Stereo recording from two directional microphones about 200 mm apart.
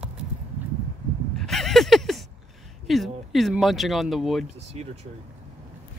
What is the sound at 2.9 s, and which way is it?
Speech, centre (ahead or behind).